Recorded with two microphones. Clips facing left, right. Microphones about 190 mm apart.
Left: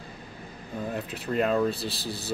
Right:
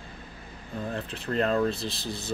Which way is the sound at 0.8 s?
5° left (ahead or behind).